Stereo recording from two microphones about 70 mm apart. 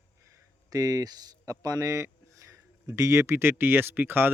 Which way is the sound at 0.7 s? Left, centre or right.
Right.